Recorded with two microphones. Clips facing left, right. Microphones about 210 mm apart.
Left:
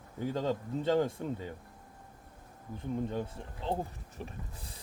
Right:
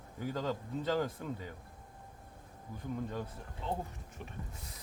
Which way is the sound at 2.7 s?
25° left (ahead or behind).